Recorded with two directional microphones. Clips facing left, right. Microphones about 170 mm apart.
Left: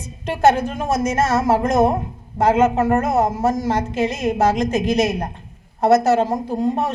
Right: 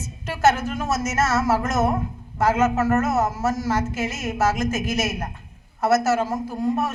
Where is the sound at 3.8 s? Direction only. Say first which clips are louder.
Left 6 dB; 15° left (ahead or behind).